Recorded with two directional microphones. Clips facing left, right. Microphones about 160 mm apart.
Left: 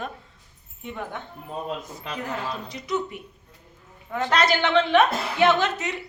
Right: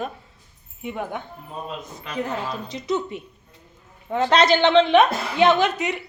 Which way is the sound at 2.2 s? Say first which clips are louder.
Right 4 dB; 25° right (ahead or behind).